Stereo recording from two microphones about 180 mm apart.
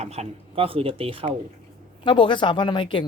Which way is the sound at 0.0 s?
35° right (ahead or behind).